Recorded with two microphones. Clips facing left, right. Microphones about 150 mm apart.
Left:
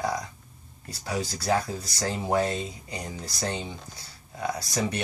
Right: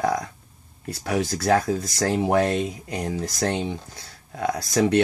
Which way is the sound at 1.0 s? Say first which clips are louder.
Right 6 dB; 75° right (ahead or behind).